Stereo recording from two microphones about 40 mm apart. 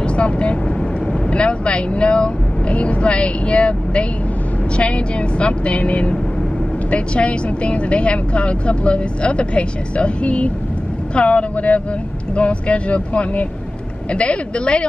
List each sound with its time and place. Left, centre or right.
0.0 s vehicle: left
1.3 s a woman's voice: left